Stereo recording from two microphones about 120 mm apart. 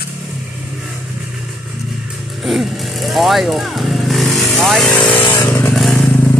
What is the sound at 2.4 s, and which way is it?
Vehicle, centre (ahead or behind).